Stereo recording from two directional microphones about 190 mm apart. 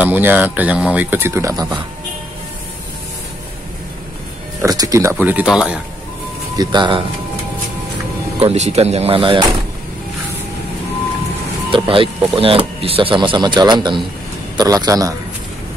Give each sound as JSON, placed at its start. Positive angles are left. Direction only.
{"t": 0.0, "sound": "speech", "side_deg": -10}
{"t": 4.6, "sound": "speech", "side_deg": -20}
{"t": 5.1, "sound": "speech", "side_deg": -5}
{"t": 6.5, "sound": "speech", "side_deg": -20}
{"t": 8.4, "sound": "speech", "side_deg": -35}
{"t": 11.7, "sound": "speech", "side_deg": -25}